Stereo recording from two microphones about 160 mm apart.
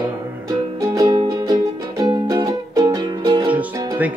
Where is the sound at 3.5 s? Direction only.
10° right (ahead or behind).